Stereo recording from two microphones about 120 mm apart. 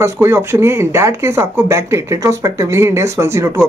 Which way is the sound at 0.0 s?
25° right (ahead or behind).